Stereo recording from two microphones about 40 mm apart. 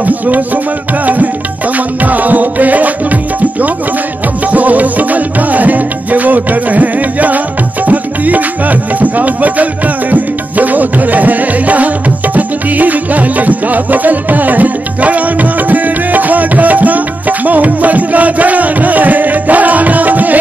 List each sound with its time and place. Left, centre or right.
1.0 s music: right
4.5 s music: right
15.7 s tabla: right
17.5 s music: right